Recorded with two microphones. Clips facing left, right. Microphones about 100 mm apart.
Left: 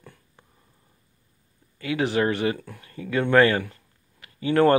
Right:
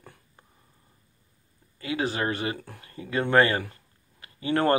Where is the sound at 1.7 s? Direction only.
25° right (ahead or behind).